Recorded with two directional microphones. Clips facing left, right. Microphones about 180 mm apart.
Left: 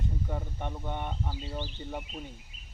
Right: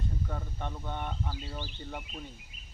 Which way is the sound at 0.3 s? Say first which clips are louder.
Left 2 dB; 15° left (ahead or behind).